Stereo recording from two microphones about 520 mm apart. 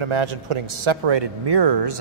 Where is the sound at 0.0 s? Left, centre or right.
Right.